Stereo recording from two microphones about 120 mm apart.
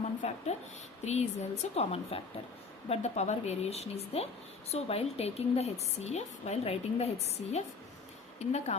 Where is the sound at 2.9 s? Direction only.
65° left (ahead or behind).